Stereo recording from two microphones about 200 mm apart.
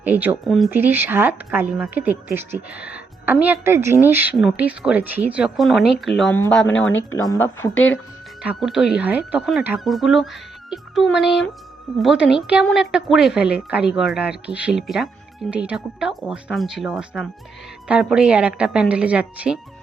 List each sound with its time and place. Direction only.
0.0 s speech: 10° right (ahead or behind)
0.4 s a woman's voice: centre (ahead or behind)
0.7 s a woman's voice: 10° right (ahead or behind)
6.7 s speech: 70° left (ahead or behind)
7.1 s a woman's voice: 15° left (ahead or behind); by 10.2 s centre (ahead or behind)
10.7 s music: centre (ahead or behind)
12.4 s a woman's voice: 5° right (ahead or behind)